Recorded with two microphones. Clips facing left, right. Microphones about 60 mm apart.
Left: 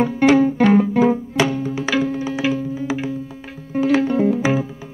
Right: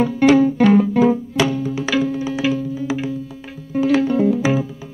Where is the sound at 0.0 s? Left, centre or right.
Left.